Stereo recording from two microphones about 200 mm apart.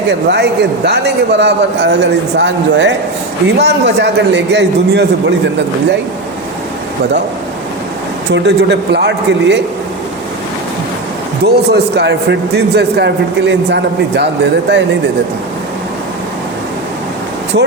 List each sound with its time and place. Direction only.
0.3 s a man's voice: 55° right (ahead or behind)
8.3 s a man's voice: 60° right (ahead or behind)
11.4 s a man's voice: 55° right (ahead or behind)